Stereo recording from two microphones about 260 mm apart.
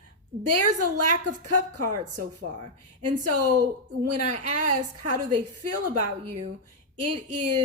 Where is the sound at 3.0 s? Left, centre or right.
Right.